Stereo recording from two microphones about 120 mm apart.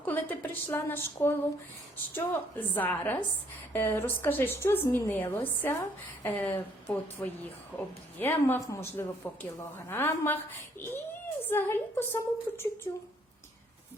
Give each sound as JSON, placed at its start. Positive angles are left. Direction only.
{"t": 0.0, "sound": "a woman's voice", "side_deg": 15}
{"t": 11.4, "sound": "speech", "side_deg": 20}